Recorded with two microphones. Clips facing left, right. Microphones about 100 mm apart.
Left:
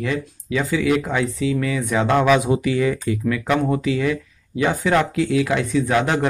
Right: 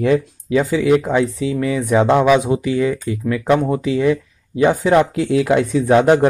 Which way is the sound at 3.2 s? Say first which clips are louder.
Right 4 dB; 30° right (ahead or behind).